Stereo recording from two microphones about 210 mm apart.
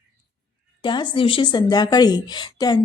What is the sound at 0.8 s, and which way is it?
A woman's voice, 20° left (ahead or behind).